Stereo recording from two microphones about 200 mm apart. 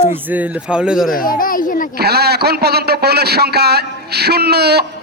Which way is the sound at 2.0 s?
55° right (ahead or behind).